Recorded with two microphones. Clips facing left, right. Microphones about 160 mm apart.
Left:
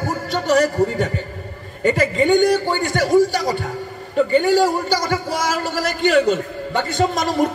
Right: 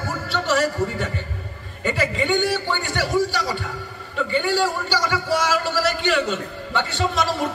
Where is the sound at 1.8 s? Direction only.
45° left (ahead or behind).